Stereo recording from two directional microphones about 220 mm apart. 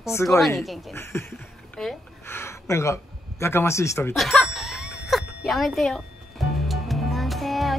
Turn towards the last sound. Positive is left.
turn(degrees=0)  # may be behind; listen again after turning